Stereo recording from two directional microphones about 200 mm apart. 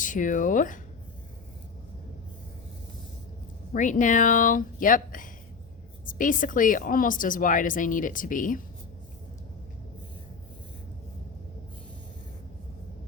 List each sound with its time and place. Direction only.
0.0 s a woman's voice: 40° left (ahead or behind)
3.8 s a woman's voice: 40° left (ahead or behind)